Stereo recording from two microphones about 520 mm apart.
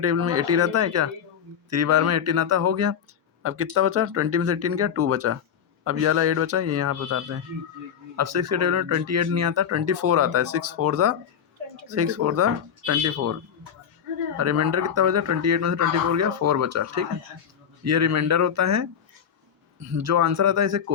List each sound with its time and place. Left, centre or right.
0.0 s speech: right
14.3 s speech: right